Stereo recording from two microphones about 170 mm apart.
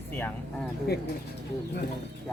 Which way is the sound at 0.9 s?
70° left (ahead or behind).